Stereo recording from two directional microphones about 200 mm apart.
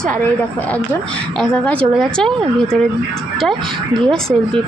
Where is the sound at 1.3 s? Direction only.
5° left (ahead or behind).